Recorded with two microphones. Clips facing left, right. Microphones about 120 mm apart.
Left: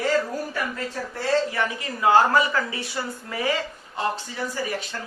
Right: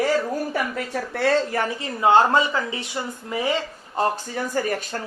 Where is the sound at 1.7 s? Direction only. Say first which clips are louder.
Right 1 dB; 25° right (ahead or behind).